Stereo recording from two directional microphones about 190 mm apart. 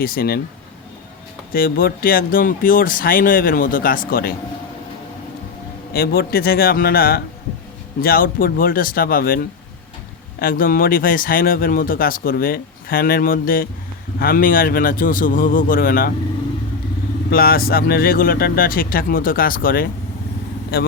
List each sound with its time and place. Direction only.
0.0 s speech: 50° left (ahead or behind)
1.5 s speech: 50° left (ahead or behind)
5.9 s speech: 55° left (ahead or behind)
17.3 s speech: 50° left (ahead or behind)